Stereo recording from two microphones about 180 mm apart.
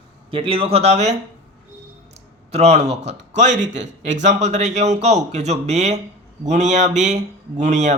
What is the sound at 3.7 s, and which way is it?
Speech, 80° right.